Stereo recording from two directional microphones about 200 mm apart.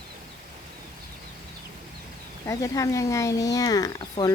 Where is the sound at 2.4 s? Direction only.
15° left (ahead or behind).